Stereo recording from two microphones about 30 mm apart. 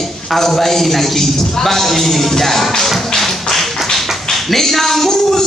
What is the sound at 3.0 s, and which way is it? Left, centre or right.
Tap, centre.